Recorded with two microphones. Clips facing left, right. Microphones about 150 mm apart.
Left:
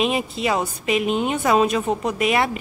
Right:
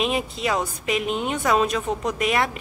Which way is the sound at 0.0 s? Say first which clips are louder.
Left 2 dB; 5° left (ahead or behind).